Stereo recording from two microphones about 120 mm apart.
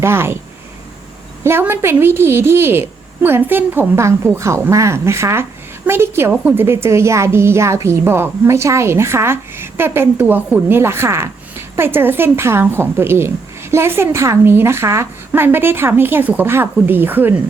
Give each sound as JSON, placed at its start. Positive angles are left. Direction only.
{"t": 0.0, "sound": "a woman's voice", "side_deg": -20}
{"t": 1.5, "sound": "a woman's voice", "side_deg": -20}